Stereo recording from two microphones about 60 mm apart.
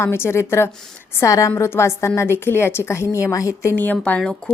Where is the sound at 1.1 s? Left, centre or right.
Left.